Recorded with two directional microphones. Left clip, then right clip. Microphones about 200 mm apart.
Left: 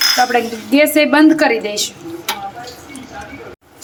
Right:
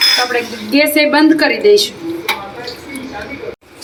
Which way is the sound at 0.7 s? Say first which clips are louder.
Even; 45° left (ahead or behind).